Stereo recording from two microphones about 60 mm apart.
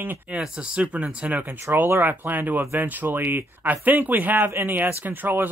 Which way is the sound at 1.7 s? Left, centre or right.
Right.